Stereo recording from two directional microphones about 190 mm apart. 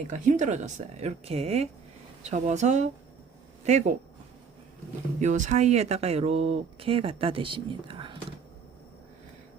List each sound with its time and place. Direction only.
0.1 s speech: 40° right (ahead or behind)
5.2 s speech: 40° right (ahead or behind)